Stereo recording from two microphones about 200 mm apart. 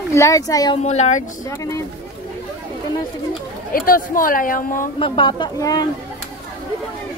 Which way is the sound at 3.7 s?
45° left (ahead or behind).